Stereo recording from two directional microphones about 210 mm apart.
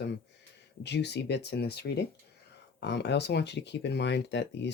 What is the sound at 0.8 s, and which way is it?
Speech, 55° left (ahead or behind).